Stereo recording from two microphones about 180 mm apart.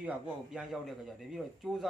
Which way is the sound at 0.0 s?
5° right (ahead or behind).